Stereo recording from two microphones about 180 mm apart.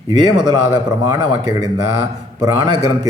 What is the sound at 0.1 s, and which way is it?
A man's voice, 25° right (ahead or behind).